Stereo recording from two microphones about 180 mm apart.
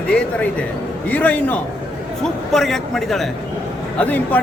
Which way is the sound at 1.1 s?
10° left (ahead or behind).